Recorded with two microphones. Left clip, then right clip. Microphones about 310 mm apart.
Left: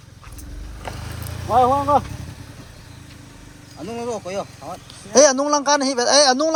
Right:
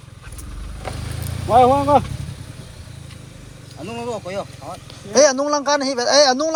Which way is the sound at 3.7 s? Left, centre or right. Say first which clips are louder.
Even; left.